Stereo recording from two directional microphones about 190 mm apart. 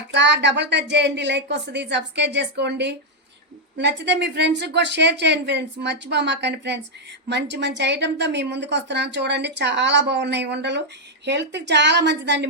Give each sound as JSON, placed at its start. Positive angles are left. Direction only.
{"t": 0.1, "sound": "a woman's voice", "side_deg": -65}